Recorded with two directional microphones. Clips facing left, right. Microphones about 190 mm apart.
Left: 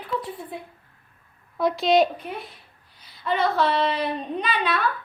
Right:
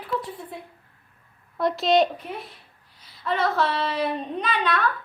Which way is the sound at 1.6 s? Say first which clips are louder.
Left 1 dB; centre (ahead or behind).